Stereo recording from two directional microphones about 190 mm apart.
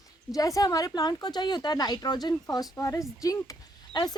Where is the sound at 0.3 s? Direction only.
20° left (ahead or behind).